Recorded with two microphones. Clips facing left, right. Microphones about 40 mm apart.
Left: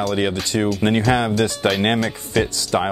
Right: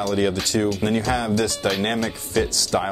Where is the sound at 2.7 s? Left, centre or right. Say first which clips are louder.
Left 3 dB; left.